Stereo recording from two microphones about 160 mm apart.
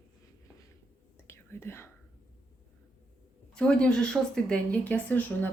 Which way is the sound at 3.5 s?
5° left (ahead or behind).